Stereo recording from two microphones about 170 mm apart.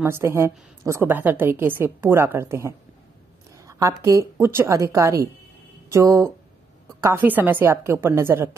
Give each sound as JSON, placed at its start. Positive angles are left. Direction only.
{"t": 0.0, "sound": "a woman's voice", "side_deg": -15}